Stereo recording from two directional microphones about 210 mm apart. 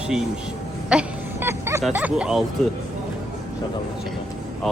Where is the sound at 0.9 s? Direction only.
5° right (ahead or behind).